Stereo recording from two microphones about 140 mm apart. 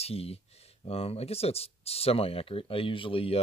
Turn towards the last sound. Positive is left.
turn(degrees=40)  # may be behind; listen again after turning